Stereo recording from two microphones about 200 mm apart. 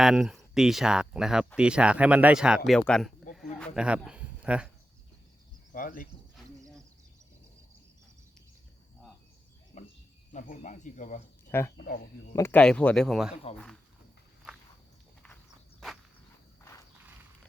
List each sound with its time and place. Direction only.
0.0 s speech: 5° right (ahead or behind)
5.7 s speech: 45° left (ahead or behind)
9.7 s cricket: 35° left (ahead or behind)
10.3 s speech: 40° left (ahead or behind)
11.8 s speech: 55° left (ahead or behind)
12.3 s speech: 10° left (ahead or behind)
13.3 s speech: 30° left (ahead or behind)